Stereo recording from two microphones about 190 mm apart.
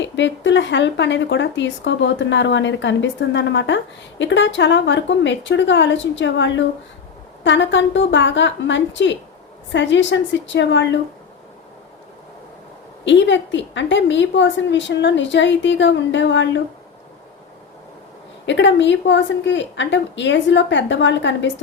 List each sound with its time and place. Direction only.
0.0 s speech: 70° left (ahead or behind)
13.1 s speech: 70° left (ahead or behind)
18.4 s speech: 70° left (ahead or behind)